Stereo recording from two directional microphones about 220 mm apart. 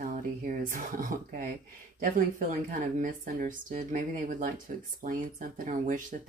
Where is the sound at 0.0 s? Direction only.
35° right (ahead or behind).